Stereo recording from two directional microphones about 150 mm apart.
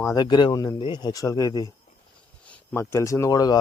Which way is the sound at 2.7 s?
20° left (ahead or behind).